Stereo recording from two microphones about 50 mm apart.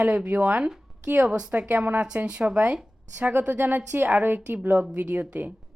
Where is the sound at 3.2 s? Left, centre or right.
Right.